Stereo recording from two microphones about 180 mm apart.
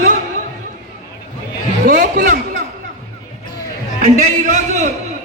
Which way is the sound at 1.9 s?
45° right (ahead or behind).